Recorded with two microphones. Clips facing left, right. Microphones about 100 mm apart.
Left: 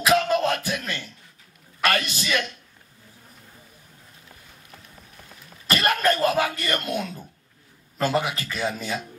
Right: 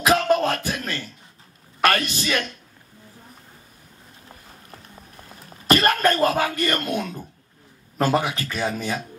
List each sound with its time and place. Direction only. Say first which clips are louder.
0.0 s music: right 2 dB; 35° right (ahead or behind)
0.7 s a sound: right 1 dB; 35° right (ahead or behind)
1.9 s a man's voice: right 2 dB; 35° right (ahead or behind)
5.4 s throat clearing: right 5 dB; 35° right (ahead or behind)
8.0 s a man's voice: right 2 dB; 35° right (ahead or behind)